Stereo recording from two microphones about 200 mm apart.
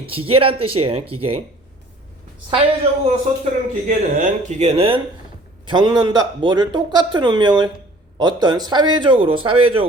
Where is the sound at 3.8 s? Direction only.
35° right (ahead or behind).